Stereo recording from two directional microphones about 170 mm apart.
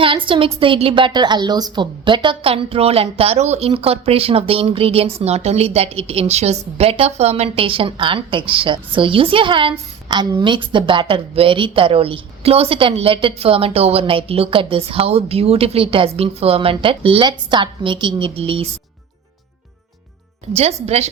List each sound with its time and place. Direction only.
0.0 s a woman's voice: 30° right (ahead or behind)
20.6 s speech: 40° right (ahead or behind)